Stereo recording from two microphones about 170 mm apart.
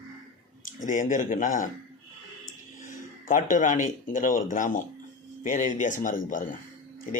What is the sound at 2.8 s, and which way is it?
A man's voice, 50° left (ahead or behind).